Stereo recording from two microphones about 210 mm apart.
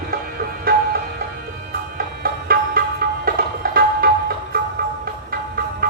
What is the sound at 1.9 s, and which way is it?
Music, 45° right (ahead or behind).